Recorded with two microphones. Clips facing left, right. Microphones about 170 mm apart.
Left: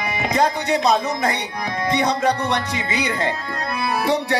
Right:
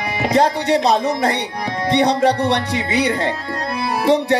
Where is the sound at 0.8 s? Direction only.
30° right (ahead or behind).